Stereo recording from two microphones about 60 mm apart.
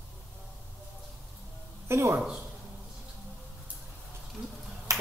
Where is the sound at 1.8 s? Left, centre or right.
Right.